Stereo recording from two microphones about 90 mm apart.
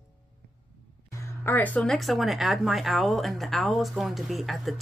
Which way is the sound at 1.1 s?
25° left (ahead or behind).